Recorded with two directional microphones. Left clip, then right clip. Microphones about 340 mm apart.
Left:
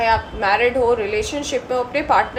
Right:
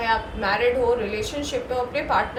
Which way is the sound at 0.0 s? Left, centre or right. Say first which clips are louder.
Left 5 dB; centre.